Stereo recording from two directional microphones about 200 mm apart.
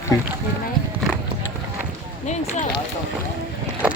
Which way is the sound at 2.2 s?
35° left (ahead or behind).